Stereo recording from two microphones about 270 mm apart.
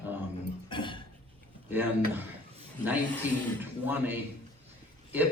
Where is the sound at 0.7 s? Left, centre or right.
Centre.